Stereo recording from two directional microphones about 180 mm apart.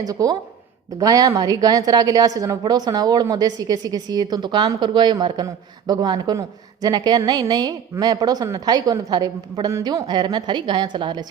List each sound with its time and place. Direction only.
0.0 s a woman's voice: 20° right (ahead or behind)